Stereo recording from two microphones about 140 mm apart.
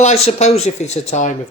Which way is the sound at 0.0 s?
50° left (ahead or behind).